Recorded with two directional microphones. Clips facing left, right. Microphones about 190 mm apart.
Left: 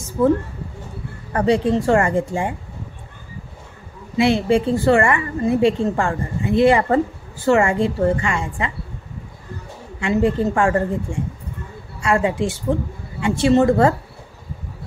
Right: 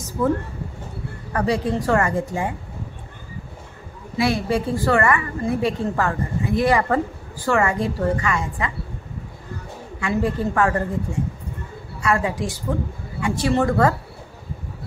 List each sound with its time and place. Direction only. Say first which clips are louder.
0.2 s a woman's voice: left 4 dB; 30° left (ahead or behind)
4.2 s a woman's voice: left 5 dB; 25° left (ahead or behind)
9.9 s a woman's voice: left 4 dB; 25° left (ahead or behind)
12.0 s a woman's voice: left 3 dB; 30° left (ahead or behind)